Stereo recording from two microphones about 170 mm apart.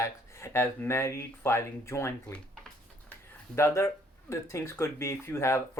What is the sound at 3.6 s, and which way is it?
Speech, 15° left (ahead or behind).